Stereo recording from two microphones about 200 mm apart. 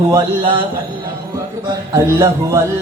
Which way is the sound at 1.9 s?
15° right (ahead or behind).